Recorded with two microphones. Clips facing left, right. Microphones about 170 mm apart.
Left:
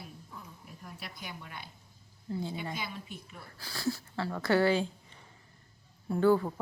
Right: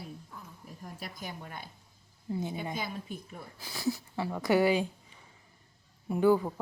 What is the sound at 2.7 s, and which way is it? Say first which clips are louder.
Speech: right 3 dB; 45° right (ahead or behind).